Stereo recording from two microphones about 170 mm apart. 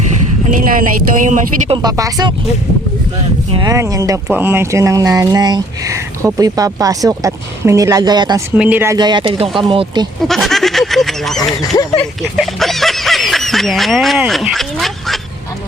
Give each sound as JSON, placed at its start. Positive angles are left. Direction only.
{"t": 0.5, "sound": "speech", "side_deg": -55}
{"t": 1.7, "sound": "speech", "side_deg": -25}
{"t": 3.5, "sound": "speech", "side_deg": -25}
{"t": 8.5, "sound": "speech", "side_deg": -10}
{"t": 9.0, "sound": "speech", "side_deg": -25}
{"t": 10.2, "sound": "speech", "side_deg": 0}
{"t": 11.6, "sound": "speech", "side_deg": 20}
{"t": 12.4, "sound": "speech", "side_deg": 0}